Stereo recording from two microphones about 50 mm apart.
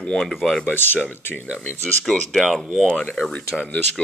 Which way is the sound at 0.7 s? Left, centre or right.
Left.